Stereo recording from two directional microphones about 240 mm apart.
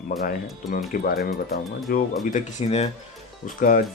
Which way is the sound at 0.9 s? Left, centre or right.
Left.